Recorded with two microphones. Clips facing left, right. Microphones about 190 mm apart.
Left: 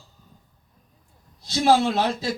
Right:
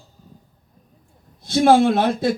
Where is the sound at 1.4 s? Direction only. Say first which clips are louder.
Right 5 dB; 55° right (ahead or behind).